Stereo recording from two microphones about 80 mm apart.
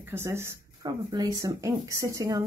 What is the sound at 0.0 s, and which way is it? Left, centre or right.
Speech, right.